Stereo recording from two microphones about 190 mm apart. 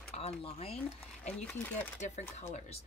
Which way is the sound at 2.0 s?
40° left (ahead or behind).